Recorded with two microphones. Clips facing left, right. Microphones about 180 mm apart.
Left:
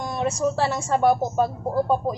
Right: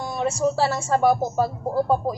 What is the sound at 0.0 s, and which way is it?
Speech, 5° right (ahead or behind).